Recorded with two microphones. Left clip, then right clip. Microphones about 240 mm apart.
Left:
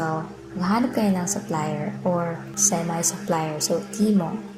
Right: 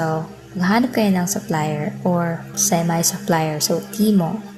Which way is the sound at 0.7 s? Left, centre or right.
Right.